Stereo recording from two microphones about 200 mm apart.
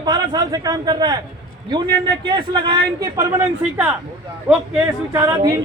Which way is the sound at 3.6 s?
10° right (ahead or behind).